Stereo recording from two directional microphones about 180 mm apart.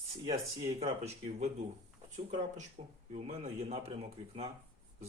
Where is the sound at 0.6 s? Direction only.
35° right (ahead or behind).